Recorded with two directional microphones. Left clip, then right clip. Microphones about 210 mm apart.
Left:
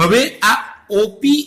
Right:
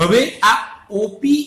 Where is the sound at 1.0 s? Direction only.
40° left (ahead or behind).